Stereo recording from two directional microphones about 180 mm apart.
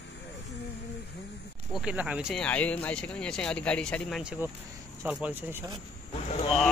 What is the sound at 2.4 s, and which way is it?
Speech, 10° left (ahead or behind).